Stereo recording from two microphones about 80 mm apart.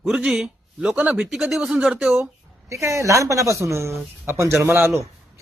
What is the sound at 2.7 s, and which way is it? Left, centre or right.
A man's voice, right.